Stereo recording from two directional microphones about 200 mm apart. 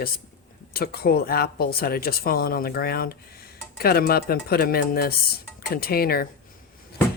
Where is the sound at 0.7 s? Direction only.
50° left (ahead or behind).